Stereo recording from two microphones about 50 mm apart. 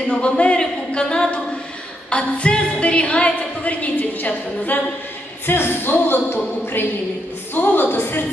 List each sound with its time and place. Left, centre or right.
0.1 s a woman's voice: left
5.5 s speech: left